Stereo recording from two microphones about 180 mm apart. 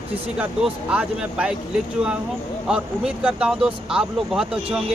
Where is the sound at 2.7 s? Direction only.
5° right (ahead or behind).